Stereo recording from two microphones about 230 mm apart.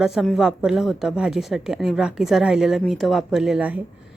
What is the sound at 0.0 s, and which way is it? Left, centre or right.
Speech, centre.